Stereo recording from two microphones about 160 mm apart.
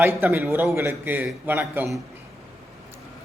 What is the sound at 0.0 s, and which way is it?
A man's voice, 15° right (ahead or behind).